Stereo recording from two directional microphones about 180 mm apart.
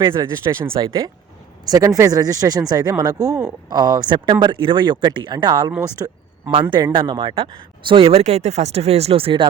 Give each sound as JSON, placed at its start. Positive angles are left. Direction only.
{"t": 0.1, "sound": "speech", "side_deg": -15}
{"t": 6.5, "sound": "speech", "side_deg": -30}